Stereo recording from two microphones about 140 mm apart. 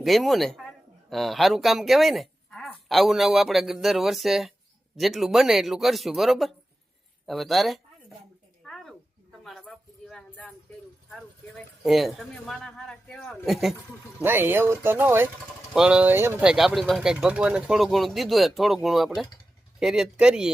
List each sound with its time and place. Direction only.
0.0 s speech: centre (ahead or behind)
8.6 s a sound: 5° left (ahead or behind)
11.9 s speech: centre (ahead or behind)
14.2 s speech: 15° right (ahead or behind)
16.4 s speech: 5° right (ahead or behind)